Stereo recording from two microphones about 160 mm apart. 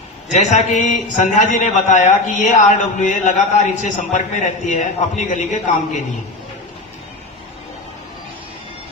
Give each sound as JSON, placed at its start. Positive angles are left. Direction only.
{"t": 0.3, "sound": "a man's voice", "side_deg": 50}